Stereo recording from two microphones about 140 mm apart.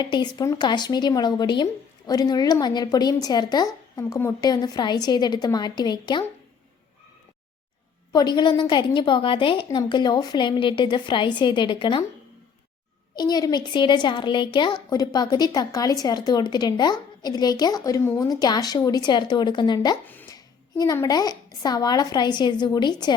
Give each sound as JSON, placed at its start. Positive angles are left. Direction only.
{"t": 0.0, "sound": "a woman's voice", "side_deg": 30}
{"t": 8.1, "sound": "a woman's voice", "side_deg": 30}
{"t": 13.1, "sound": "a woman's voice", "side_deg": 30}